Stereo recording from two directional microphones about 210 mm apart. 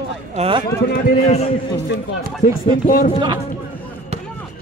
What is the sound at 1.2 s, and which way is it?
Speech, 30° left (ahead or behind).